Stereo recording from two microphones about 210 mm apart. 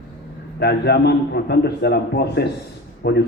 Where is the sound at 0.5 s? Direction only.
50° left (ahead or behind).